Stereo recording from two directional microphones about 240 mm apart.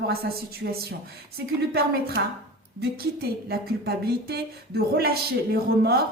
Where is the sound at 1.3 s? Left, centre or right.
Right.